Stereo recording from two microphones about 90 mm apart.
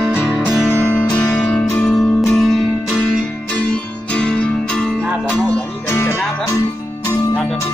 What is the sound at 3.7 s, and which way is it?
Music, 10° left (ahead or behind).